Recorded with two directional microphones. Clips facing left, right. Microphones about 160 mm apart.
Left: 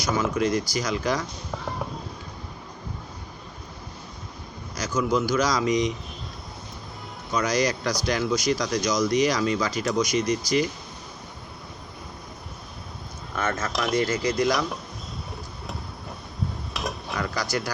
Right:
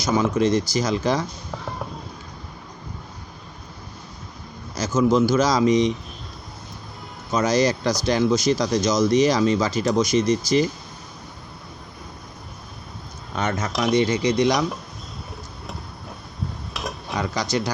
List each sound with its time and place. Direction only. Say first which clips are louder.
0.0 s speech: right 4 dB; 25° right (ahead or behind)
1.5 s a sound: even; centre (ahead or behind)
4.8 s speech: right 6 dB; 25° right (ahead or behind)
7.3 s speech: right 4 dB; 25° right (ahead or behind)
13.3 s speech: right 2 dB; 20° right (ahead or behind)
16.7 s a sound: even; centre (ahead or behind)
17.2 s speech: right 4 dB; 20° right (ahead or behind)